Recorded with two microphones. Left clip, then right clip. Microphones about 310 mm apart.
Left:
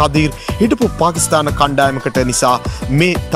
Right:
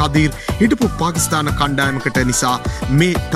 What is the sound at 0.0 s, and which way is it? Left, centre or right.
Speech, centre.